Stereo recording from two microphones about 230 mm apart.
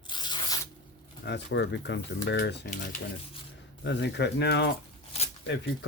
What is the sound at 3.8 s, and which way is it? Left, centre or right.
Speech, left.